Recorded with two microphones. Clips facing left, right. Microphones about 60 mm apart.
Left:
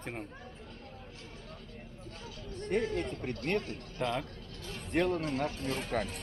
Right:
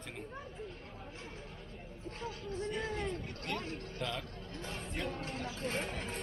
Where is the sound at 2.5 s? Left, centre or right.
Left.